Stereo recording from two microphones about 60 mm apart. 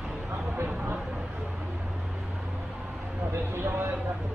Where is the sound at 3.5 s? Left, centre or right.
Right.